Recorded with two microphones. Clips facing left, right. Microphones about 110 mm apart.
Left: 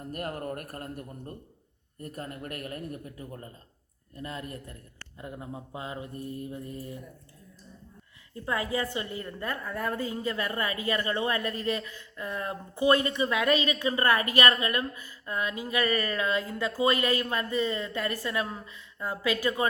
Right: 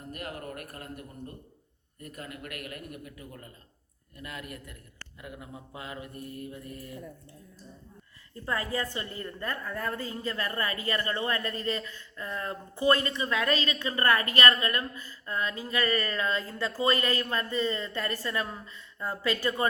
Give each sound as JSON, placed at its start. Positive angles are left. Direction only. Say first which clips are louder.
{"t": 0.1, "sound": "a man's voice", "louder": "left 4 dB", "side_deg": 40}
{"t": 8.4, "sound": "a woman's voice", "louder": "left 2 dB", "side_deg": 15}